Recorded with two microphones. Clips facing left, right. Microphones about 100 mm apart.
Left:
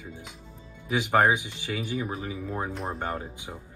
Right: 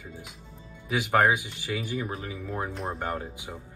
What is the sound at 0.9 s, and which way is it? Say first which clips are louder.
Speech: left 1 dB; 15° left (ahead or behind).